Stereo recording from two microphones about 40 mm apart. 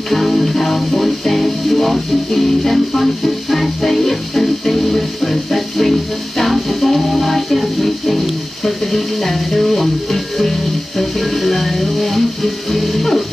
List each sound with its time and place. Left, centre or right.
0.1 s music: centre